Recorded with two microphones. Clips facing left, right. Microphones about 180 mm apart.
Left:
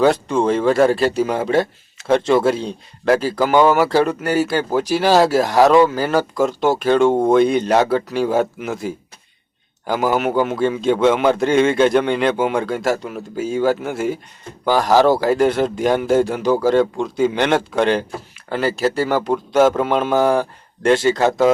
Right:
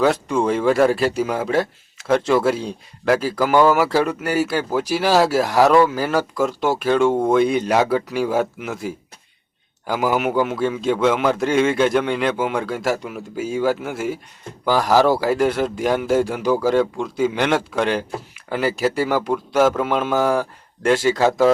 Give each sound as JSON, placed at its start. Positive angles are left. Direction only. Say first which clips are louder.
{"t": 0.0, "sound": "a man's voice", "louder": "left 2 dB", "side_deg": -5}
{"t": 3.5, "sound": "a man's voice", "louder": "left 1 dB", "side_deg": 20}
{"t": 3.8, "sound": "a man's voice", "louder": "left 3 dB", "side_deg": -5}
{"t": 15.2, "sound": "a man's voice", "louder": "left 3 dB", "side_deg": -5}
{"t": 19.3, "sound": "a man's voice", "louder": "left 4 dB", "side_deg": 25}
{"t": 19.7, "sound": "a man's voice", "louder": "left 3 dB", "side_deg": -5}
{"t": 21.2, "sound": "speech", "louder": "left 1 dB", "side_deg": 20}